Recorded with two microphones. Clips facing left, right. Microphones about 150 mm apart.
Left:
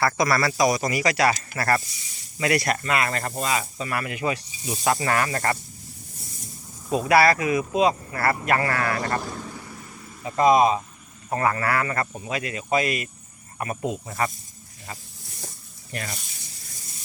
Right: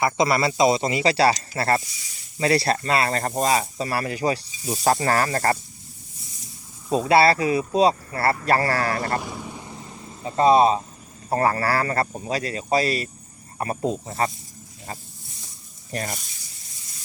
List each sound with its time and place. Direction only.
0.0 s speech: 25° right (ahead or behind)
7.1 s speech: 30° right (ahead or behind)
9.2 s vehicle: 10° right (ahead or behind); by 10.8 s 30° right (ahead or behind)
11.3 s speech: 35° right (ahead or behind)
15.9 s speech: 35° right (ahead or behind)